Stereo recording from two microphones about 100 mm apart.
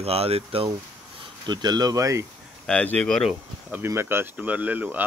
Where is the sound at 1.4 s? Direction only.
45° right (ahead or behind).